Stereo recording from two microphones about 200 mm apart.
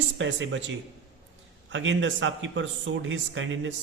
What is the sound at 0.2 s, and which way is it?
A man's voice, 70° right (ahead or behind).